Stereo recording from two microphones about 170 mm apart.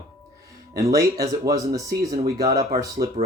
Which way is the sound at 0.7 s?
20° right (ahead or behind).